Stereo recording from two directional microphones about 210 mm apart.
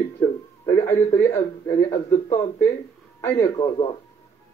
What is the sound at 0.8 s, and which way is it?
Speech, 10° left (ahead or behind).